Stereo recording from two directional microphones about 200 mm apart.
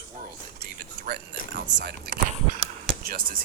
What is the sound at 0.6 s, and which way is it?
Speech, 50° right (ahead or behind).